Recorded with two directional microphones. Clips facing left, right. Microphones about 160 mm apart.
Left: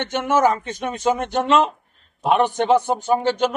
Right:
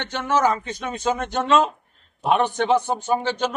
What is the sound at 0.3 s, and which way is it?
Speech, 45° left (ahead or behind).